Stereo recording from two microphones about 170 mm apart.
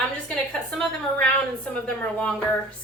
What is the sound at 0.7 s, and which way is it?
A woman's voice, 5° left (ahead or behind).